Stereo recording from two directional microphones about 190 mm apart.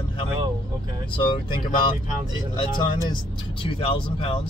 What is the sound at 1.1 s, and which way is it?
Speech, 25° left (ahead or behind).